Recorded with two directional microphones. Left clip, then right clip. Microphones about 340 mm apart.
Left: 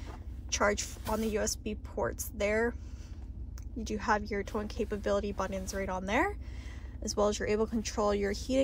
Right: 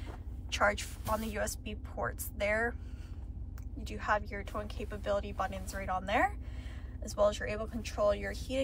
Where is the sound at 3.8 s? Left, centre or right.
Centre.